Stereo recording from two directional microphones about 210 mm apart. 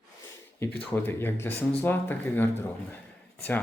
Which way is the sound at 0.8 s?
10° left (ahead or behind).